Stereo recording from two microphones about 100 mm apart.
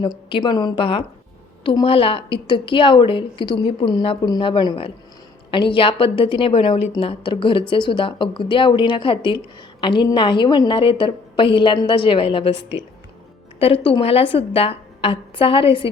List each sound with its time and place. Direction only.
0.0 s a woman's voice: 55° left (ahead or behind)
1.8 s a woman's voice: 70° left (ahead or behind)
7.0 s a woman's voice: 60° left (ahead or behind)
14.0 s a woman's voice: 75° left (ahead or behind)